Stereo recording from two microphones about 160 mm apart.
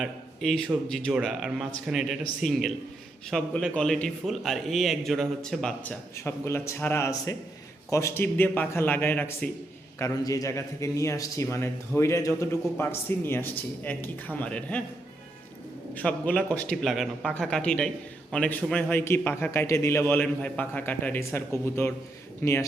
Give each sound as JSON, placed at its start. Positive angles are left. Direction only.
{"t": 0.0, "sound": "a man's voice", "side_deg": 0}
{"t": 16.0, "sound": "a man's voice", "side_deg": 10}